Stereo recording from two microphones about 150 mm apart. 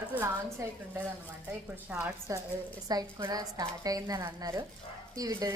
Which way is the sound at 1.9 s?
10° right (ahead or behind).